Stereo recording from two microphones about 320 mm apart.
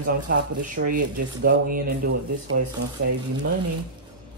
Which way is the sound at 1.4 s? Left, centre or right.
Right.